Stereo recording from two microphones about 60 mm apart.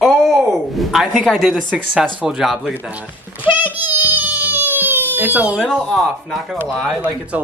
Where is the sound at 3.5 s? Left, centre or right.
Right.